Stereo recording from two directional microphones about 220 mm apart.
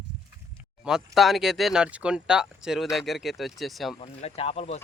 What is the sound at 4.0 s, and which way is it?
Speech, 25° left (ahead or behind).